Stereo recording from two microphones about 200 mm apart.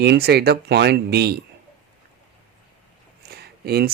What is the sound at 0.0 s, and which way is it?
Speech, 55° right (ahead or behind).